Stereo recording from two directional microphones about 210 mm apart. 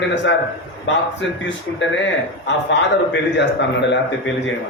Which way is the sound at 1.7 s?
60° left (ahead or behind).